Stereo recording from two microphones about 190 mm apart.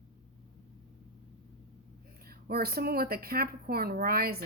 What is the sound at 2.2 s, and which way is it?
A woman's voice, 55° right (ahead or behind).